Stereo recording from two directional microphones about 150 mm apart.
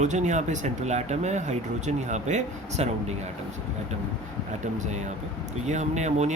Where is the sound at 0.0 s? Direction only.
50° right (ahead or behind).